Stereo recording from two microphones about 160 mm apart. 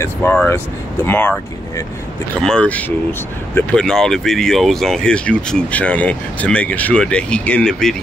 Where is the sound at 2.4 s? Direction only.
5° left (ahead or behind).